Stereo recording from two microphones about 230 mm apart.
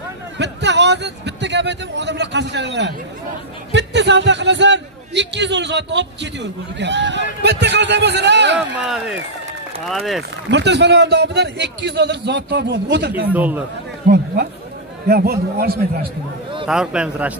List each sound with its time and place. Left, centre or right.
0.4 s a man's voice: right
8.5 s speech: centre
10.5 s a man's voice: right
13.3 s speech: centre
14.1 s a man's voice: right
16.6 s speech: centre